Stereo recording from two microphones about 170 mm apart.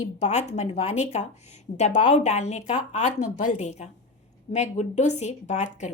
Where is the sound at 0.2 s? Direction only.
40° left (ahead or behind).